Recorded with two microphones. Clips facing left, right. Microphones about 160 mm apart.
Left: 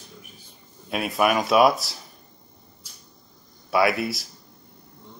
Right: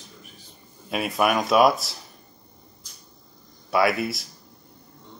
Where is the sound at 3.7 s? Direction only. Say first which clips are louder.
Even; centre (ahead or behind).